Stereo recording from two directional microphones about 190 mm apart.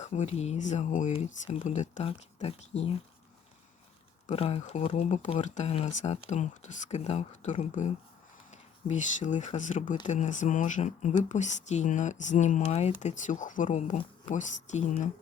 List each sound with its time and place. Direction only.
0.0 s speech: 35° left (ahead or behind)
4.3 s speech: 30° left (ahead or behind)